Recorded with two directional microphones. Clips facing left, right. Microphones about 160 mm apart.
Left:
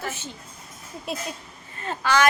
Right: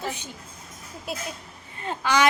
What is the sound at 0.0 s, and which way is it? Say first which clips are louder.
Speech: right 1 dB; 15° right (ahead or behind).